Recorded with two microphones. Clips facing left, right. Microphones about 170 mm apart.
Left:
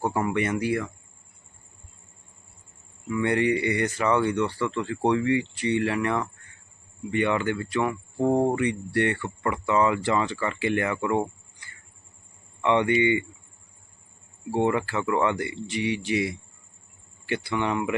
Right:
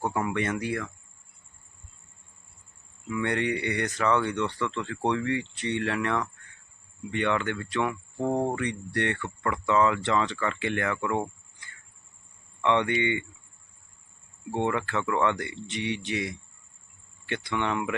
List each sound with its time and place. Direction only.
0.0 s speech: 5° left (ahead or behind)
3.1 s speech: 5° left (ahead or behind)
12.6 s speech: 10° left (ahead or behind)
14.5 s speech: 10° left (ahead or behind)